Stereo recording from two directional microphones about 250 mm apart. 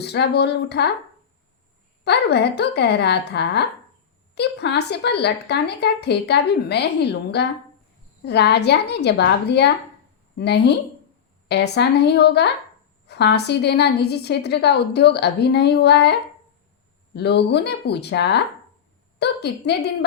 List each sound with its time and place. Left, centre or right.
0.0 s a woman's voice: left
2.0 s a woman's voice: left
17.2 s a woman's voice: left